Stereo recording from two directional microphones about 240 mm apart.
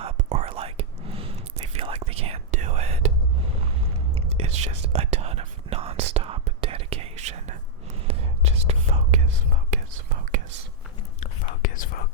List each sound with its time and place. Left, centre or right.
0.0 s whispering: right
4.1 s whispering: right
11.2 s whispering: left